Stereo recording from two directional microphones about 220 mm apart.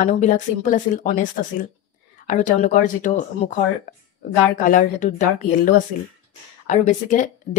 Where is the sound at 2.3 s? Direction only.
35° left (ahead or behind).